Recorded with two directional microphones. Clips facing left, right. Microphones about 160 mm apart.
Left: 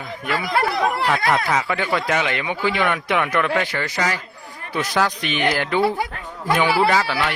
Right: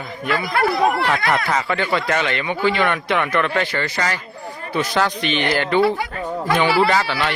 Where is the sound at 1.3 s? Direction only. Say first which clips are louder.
Even; 5° left (ahead or behind).